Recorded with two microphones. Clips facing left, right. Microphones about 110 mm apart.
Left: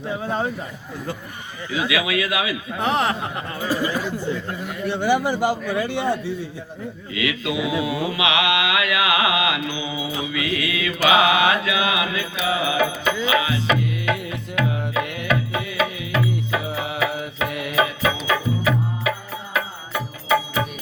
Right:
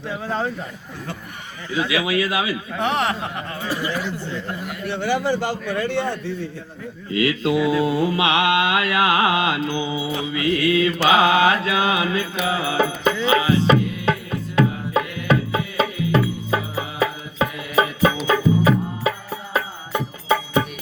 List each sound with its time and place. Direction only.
0.1 s speech: 15° left (ahead or behind)
1.9 s music: 30° right (ahead or behind)
2.7 s speech: 10° left (ahead or behind)
7.1 s music: 35° right (ahead or behind)
15.0 s music: 65° left (ahead or behind)
15.3 s music: 30° right (ahead or behind)